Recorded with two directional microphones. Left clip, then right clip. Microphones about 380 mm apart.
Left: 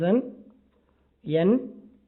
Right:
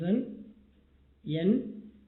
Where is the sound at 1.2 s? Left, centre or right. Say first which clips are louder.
Left 8 dB; centre.